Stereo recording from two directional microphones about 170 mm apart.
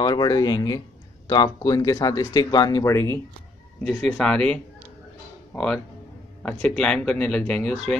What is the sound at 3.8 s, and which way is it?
Speech, 5° left (ahead or behind).